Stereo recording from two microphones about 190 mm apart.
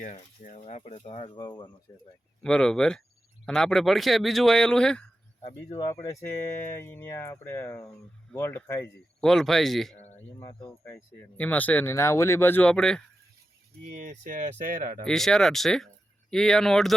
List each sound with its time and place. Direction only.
0.0 s speech: 40° left (ahead or behind); by 1.7 s 25° left (ahead or behind)
2.4 s speech: 5° left (ahead or behind)
5.8 s speech: 15° left (ahead or behind)
9.2 s speech: centre (ahead or behind)
10.5 s speech: 30° left (ahead or behind)
10.9 s speech: 10° left (ahead or behind)
13.9 s speech: 45° right (ahead or behind)
15.0 s speech: centre (ahead or behind)